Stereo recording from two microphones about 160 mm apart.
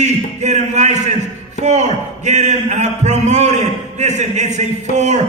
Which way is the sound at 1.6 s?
45° right (ahead or behind).